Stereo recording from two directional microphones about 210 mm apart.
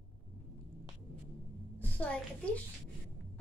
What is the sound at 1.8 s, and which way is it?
Speech, 5° left (ahead or behind).